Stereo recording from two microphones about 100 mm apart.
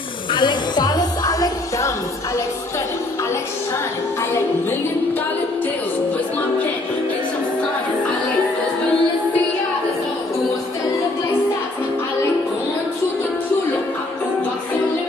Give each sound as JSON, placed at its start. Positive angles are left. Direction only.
{"t": 0.3, "sound": "music", "side_deg": 50}